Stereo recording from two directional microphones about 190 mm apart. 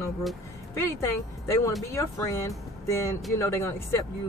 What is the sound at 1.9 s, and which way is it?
Speech, 15° left (ahead or behind).